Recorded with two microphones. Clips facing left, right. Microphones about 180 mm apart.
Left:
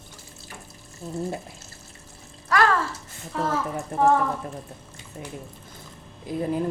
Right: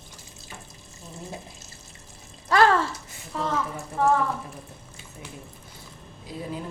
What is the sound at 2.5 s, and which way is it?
Speech, 25° right (ahead or behind).